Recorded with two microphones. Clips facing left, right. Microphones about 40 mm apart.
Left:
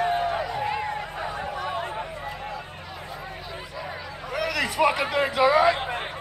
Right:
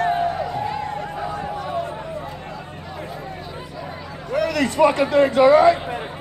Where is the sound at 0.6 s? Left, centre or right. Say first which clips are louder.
Right 2 dB; left.